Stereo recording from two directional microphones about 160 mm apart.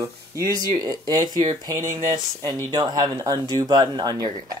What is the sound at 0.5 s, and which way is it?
Speech, 25° right (ahead or behind).